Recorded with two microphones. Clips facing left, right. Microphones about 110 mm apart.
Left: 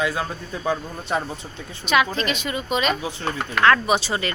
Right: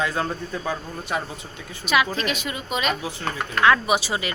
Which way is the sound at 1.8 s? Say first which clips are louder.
Left 2 dB; 5° right (ahead or behind).